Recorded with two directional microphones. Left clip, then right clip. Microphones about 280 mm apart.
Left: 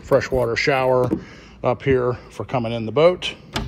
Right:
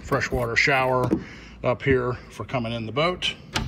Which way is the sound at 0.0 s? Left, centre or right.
Centre.